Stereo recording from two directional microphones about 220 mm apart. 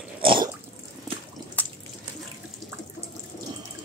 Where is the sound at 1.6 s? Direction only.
5° left (ahead or behind).